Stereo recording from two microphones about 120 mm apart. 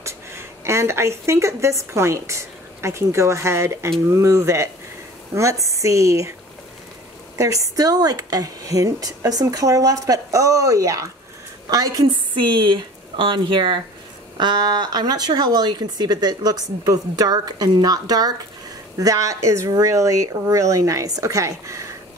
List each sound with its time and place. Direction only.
0.0 s a woman's voice: 20° right (ahead or behind)
7.3 s a woman's voice: 25° right (ahead or behind)